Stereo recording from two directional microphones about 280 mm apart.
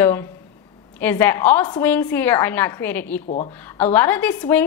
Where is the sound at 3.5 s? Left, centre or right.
Centre.